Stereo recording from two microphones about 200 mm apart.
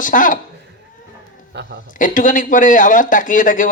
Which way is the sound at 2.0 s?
40° left (ahead or behind).